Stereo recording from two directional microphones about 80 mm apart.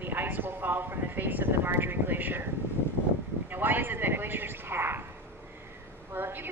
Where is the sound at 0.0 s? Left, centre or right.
Right.